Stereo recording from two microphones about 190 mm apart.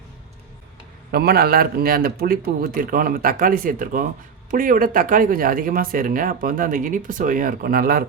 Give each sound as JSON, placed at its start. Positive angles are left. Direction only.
{"t": 1.1, "sound": "speech", "side_deg": -55}